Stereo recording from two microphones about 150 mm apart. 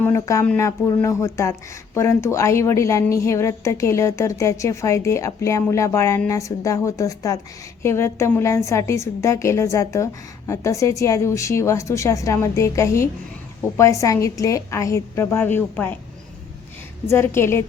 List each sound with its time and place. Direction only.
0.0 s a woman's voice: 20° left (ahead or behind)
17.1 s a woman's voice: 15° left (ahead or behind)